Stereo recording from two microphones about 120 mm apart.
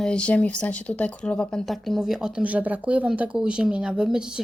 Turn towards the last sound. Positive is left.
turn(degrees=-5)  # may be behind; listen again after turning